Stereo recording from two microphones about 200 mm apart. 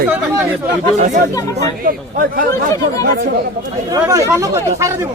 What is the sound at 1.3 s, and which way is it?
Speech, 15° left (ahead or behind).